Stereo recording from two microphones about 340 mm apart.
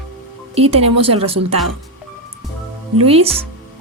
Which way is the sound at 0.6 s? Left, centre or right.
Centre.